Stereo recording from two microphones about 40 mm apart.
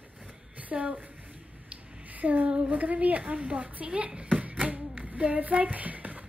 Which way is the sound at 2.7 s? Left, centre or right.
Right.